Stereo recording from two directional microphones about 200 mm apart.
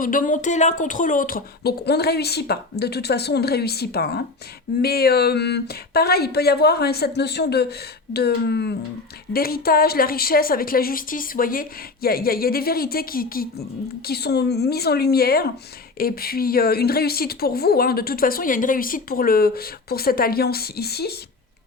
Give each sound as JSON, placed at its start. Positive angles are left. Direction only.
{"t": 0.0, "sound": "speech", "side_deg": 40}